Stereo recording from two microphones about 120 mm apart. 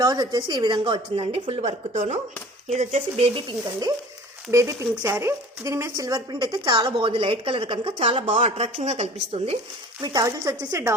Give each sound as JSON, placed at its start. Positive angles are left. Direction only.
{"t": 0.0, "sound": "speech", "side_deg": -35}
{"t": 2.6, "sound": "speech", "side_deg": -65}
{"t": 4.5, "sound": "speech", "side_deg": -25}
{"t": 7.0, "sound": "speech", "side_deg": -45}
{"t": 10.0, "sound": "speech", "side_deg": -35}